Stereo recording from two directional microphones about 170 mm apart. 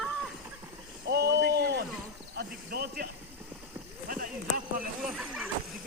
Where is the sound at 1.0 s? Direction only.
75° right (ahead or behind).